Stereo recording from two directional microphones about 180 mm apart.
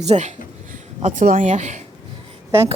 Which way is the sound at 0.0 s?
40° right (ahead or behind).